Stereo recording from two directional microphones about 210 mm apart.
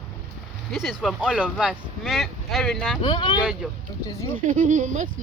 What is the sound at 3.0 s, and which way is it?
Speech, 20° left (ahead or behind).